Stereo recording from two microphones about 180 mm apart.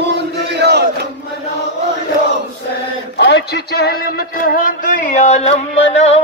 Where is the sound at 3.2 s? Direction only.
70° left (ahead or behind).